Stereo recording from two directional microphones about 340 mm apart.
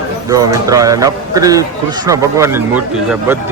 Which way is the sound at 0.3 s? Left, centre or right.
Centre.